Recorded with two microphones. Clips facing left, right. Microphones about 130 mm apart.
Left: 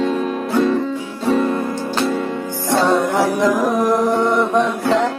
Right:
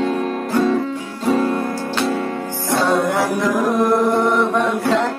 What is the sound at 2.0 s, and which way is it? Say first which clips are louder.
Music: left 1 dB; centre (ahead or behind).